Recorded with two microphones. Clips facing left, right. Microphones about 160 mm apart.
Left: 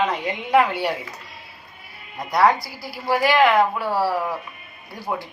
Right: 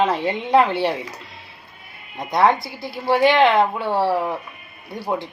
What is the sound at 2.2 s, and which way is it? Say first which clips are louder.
Speech: right 1 dB; 20° right (ahead or behind).